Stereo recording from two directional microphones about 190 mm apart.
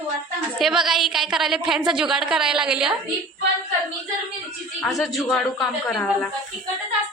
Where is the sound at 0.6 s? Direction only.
Centre (ahead or behind).